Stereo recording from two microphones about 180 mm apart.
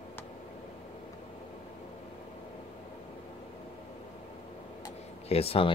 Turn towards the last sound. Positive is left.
turn(degrees=35)  # may be behind; listen again after turning